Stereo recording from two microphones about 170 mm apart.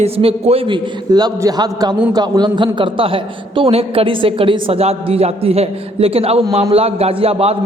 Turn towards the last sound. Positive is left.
turn(degrees=-35)  # may be behind; listen again after turning